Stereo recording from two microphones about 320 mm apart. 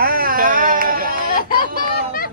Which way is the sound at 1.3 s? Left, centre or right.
Left.